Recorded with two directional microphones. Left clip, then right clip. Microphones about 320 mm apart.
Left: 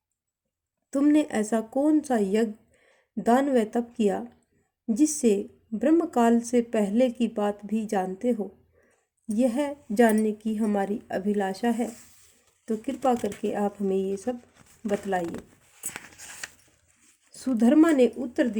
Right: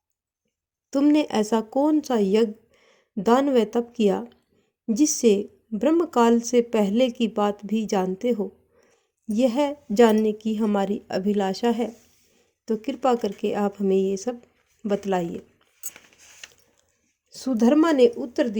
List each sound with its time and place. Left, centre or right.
0.9 s a woman's voice: right
17.3 s a woman's voice: centre